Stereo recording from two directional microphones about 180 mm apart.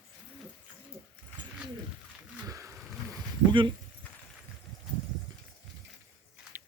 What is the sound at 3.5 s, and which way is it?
Speech, 25° right (ahead or behind).